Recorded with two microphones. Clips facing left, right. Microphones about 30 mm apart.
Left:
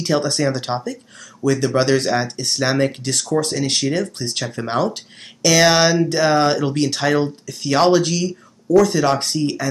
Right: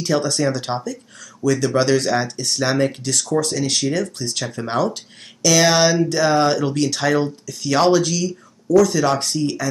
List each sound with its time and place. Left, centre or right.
0.0 s speech: centre
8.6 s speech: left
9.2 s speech: centre